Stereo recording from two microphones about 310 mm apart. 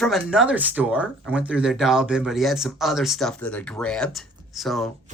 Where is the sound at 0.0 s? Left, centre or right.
Centre.